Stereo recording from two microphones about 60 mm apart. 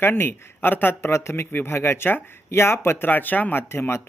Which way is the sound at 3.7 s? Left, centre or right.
Left.